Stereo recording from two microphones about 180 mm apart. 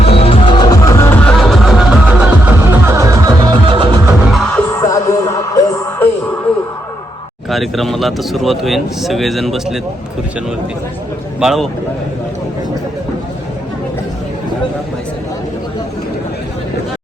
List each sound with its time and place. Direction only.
0.0 s music: 35° left (ahead or behind); by 4.0 s 25° right (ahead or behind)
4.3 s music: centre (ahead or behind)
4.8 s music: 20° left (ahead or behind)
7.5 s speech: centre (ahead or behind)
11.3 s speech: centre (ahead or behind)